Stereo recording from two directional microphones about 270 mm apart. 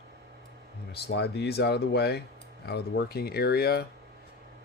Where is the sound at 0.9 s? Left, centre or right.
Left.